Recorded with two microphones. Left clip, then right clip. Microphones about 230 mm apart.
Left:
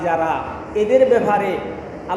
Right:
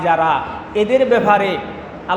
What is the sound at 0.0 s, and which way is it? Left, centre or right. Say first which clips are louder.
A man's voice: right 4 dB; right.